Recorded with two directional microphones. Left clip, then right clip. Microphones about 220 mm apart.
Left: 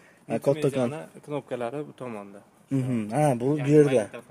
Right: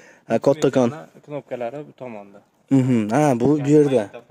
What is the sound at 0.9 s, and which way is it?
Speech, 30° left (ahead or behind).